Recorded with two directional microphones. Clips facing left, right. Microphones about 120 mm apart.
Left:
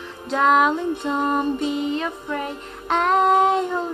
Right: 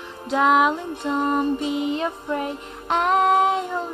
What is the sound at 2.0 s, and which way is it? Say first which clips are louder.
Child singing: right 1 dB; 20° right (ahead or behind).